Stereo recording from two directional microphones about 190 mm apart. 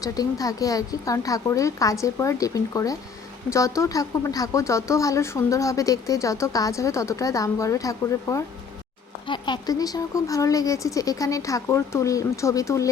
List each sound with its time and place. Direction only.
0.0 s speech: 20° left (ahead or behind)